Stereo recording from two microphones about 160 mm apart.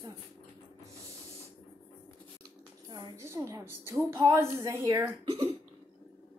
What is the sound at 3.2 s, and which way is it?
A woman's voice, 20° right (ahead or behind).